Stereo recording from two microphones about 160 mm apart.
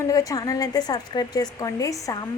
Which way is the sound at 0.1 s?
20° left (ahead or behind).